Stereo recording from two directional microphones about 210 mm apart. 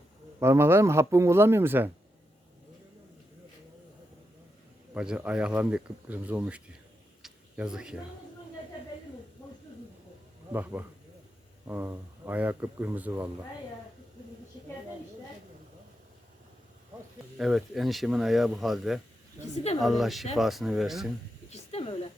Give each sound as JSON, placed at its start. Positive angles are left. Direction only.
{"t": 0.3, "sound": "speech", "side_deg": -10}
{"t": 4.9, "sound": "speech", "side_deg": -5}
{"t": 7.2, "sound": "tick-tock", "side_deg": -5}
{"t": 10.5, "sound": "speech", "side_deg": -10}
{"t": 17.3, "sound": "speech", "side_deg": 0}
{"t": 19.5, "sound": "speech", "side_deg": 30}
{"t": 19.8, "sound": "speech", "side_deg": 0}
{"t": 21.5, "sound": "snake", "side_deg": 30}